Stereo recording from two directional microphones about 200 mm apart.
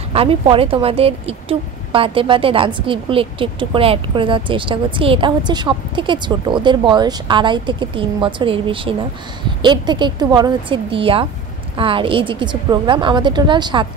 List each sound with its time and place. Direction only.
0.1 s speech: 30° right (ahead or behind)